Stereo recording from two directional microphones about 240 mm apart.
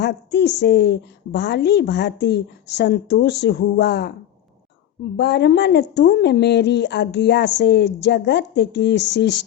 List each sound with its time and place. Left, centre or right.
0.0 s a woman's voice: left
5.1 s a woman's voice: left